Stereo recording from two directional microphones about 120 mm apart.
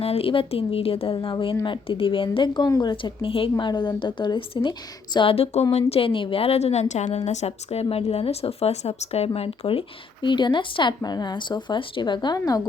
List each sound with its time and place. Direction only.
0.0 s a woman's voice: 55° left (ahead or behind)
2.6 s speech: 30° left (ahead or behind)
2.9 s a woman's voice: 45° left (ahead or behind)
3.6 s a woman's voice: 40° left (ahead or behind)